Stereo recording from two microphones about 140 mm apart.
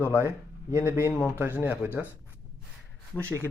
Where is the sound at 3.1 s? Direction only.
10° left (ahead or behind).